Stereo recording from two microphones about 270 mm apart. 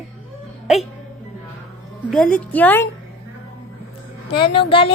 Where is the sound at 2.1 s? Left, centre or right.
Centre.